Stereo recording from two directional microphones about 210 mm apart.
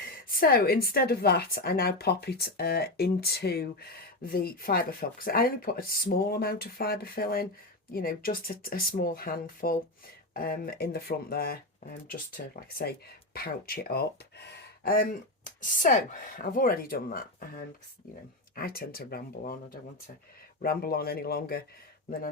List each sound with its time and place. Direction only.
0.3 s speech: 45° left (ahead or behind)
18.5 s speech: 45° left (ahead or behind)
20.6 s speech: 45° left (ahead or behind)